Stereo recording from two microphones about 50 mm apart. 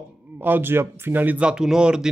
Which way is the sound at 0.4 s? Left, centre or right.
Right.